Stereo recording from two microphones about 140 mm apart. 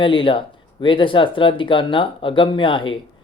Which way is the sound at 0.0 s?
40° left (ahead or behind).